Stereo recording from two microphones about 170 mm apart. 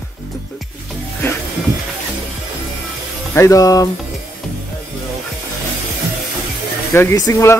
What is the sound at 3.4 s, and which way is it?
Speech, 20° left (ahead or behind).